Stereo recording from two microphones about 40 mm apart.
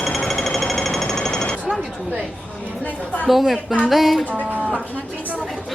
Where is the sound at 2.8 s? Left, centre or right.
Left.